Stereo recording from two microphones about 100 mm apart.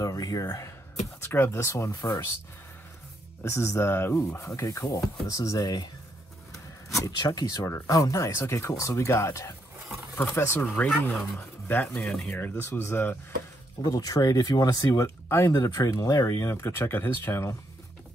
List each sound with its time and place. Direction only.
0.0 s speech: 40° left (ahead or behind)
3.5 s speech: 30° left (ahead or behind)
13.8 s speech: 35° left (ahead or behind)
15.2 s speech: 30° left (ahead or behind)